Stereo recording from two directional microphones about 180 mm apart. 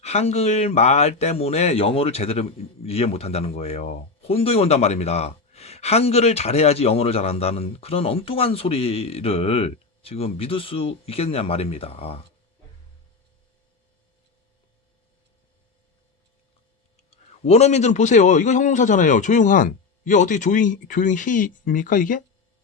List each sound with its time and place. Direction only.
0.0 s speech: 35° left (ahead or behind)
17.0 s a man's voice: 35° left (ahead or behind)